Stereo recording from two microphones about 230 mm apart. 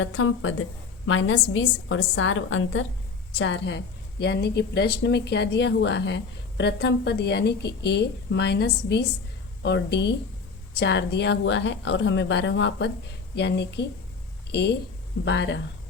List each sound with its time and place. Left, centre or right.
0.0 s a woman's voice: left